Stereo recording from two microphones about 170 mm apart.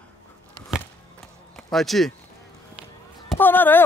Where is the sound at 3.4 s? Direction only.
10° left (ahead or behind).